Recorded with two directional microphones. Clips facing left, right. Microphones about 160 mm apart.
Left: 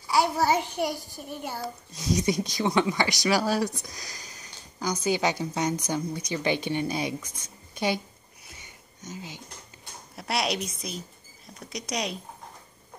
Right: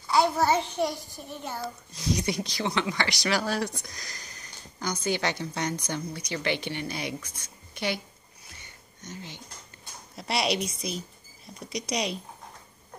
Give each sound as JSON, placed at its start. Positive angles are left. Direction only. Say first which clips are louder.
{"t": 0.0, "sound": "speech", "louder": "right 1 dB", "side_deg": 10}
{"t": 10.1, "sound": "a woman's voice", "louder": "right 1 dB", "side_deg": 0}